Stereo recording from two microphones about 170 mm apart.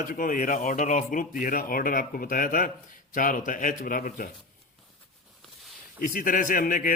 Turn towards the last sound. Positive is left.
turn(degrees=55)  # may be behind; listen again after turning